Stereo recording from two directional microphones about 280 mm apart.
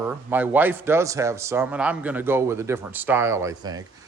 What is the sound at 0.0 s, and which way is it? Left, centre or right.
Speech, centre.